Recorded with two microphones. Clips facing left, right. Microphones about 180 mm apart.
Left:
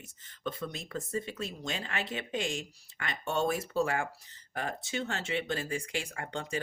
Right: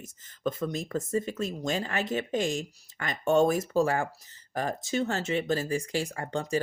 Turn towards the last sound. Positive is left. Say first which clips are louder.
# right 6 dB
turn(degrees=-40)  # may be behind; listen again after turning